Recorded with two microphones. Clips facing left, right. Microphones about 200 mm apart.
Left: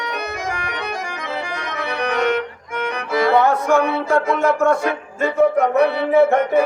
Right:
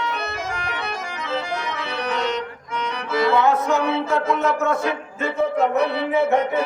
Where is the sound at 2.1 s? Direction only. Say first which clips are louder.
Left 5 dB; 60° left (ahead or behind).